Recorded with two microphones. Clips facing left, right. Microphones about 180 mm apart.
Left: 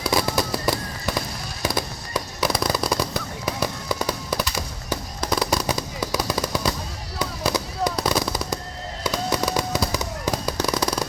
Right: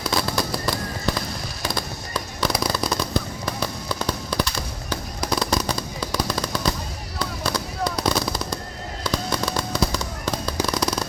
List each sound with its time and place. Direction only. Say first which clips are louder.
0.0 s fireworks: left 2 dB; 15° left (ahead or behind)